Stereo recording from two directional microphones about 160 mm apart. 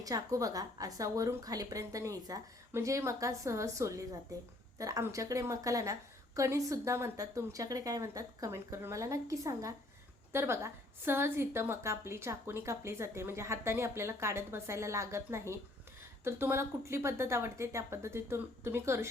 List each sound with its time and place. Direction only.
0.0 s a woman's voice: 20° right (ahead or behind)